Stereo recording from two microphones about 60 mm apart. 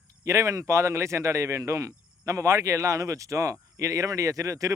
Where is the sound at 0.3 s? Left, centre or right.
Right.